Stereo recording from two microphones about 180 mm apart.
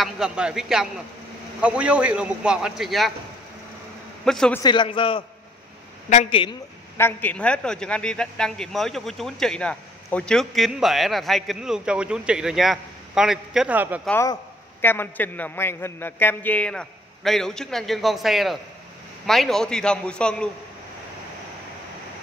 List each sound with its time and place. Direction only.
0.0 s a man's voice: 5° right (ahead or behind)
4.2 s speech: 5° left (ahead or behind)
4.6 s a man's voice: 25° left (ahead or behind)
6.0 s a woman's voice: 40° left (ahead or behind)
7.0 s a man's voice: 10° left (ahead or behind); by 14.0 s 10° right (ahead or behind)
14.0 s a man's voice: 10° left (ahead or behind)